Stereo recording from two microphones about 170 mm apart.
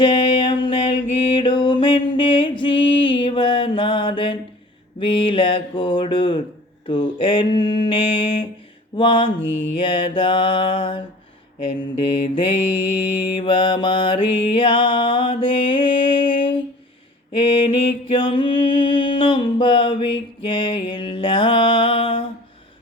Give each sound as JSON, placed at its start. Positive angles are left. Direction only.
{"t": 0.0, "sound": "mantra", "side_deg": 25}
{"t": 1.4, "sound": "music", "side_deg": 30}
{"t": 4.9, "sound": "mantra", "side_deg": 30}
{"t": 9.4, "sound": "mantra", "side_deg": 90}
{"t": 9.7, "sound": "mantra", "side_deg": 30}
{"t": 12.9, "sound": "mantra", "side_deg": 30}
{"t": 17.7, "sound": "music", "side_deg": 30}